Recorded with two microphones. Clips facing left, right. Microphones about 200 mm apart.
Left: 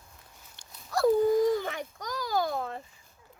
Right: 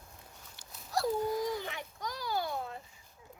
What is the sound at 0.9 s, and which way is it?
Dog, 55° left (ahead or behind).